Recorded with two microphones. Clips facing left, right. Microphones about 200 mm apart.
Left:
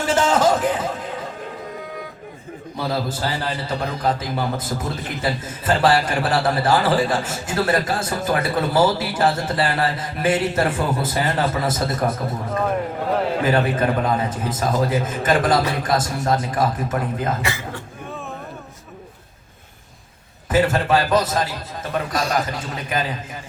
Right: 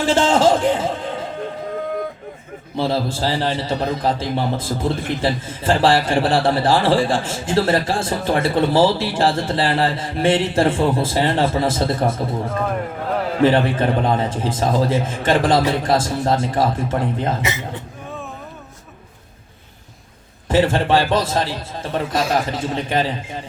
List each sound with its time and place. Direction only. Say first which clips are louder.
0.0 s a sound: right 3 dB; 30° right (ahead or behind)
2.7 s a man's voice: right 4 dB; 30° right (ahead or behind)
13.4 s a man's voice: right 7 dB; 30° right (ahead or behind)
20.5 s a man's voice: right 2 dB; 30° right (ahead or behind)